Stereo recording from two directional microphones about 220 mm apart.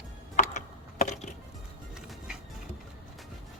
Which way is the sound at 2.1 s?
5° right (ahead or behind).